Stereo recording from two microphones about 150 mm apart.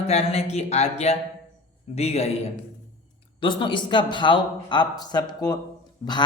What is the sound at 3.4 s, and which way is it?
Speech, 30° left (ahead or behind).